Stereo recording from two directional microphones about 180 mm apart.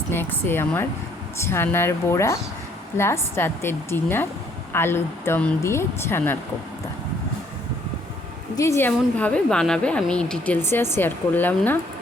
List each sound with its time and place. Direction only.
0.1 s a woman's voice: 10° left (ahead or behind)
8.5 s a woman's voice: 15° left (ahead or behind)